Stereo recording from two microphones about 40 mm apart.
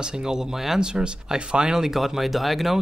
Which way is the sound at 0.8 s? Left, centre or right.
Right.